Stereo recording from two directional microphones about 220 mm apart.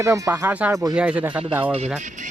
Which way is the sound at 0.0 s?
15° right (ahead or behind).